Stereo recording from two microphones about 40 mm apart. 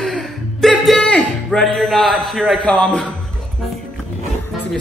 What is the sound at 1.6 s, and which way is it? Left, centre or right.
Speech, centre.